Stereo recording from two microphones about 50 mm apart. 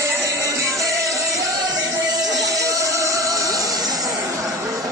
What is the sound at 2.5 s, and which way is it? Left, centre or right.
Music, right.